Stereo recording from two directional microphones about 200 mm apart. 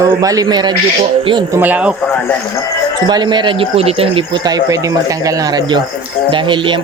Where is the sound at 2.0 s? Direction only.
10° left (ahead or behind).